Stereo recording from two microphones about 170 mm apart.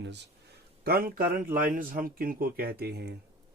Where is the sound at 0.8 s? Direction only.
60° right (ahead or behind).